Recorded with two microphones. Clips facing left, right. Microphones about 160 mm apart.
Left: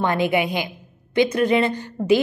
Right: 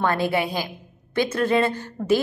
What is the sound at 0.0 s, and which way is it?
Speech, 15° left (ahead or behind).